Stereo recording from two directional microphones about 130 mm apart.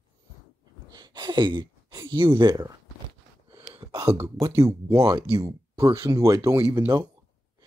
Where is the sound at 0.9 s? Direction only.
35° right (ahead or behind).